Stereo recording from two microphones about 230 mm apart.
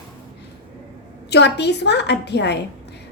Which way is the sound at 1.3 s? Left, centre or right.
Left.